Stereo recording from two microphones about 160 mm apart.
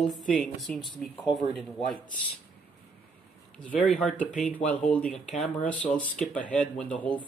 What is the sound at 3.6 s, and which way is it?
Speech, 10° left (ahead or behind).